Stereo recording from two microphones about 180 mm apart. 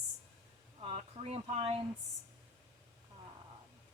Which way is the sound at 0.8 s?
35° right (ahead or behind).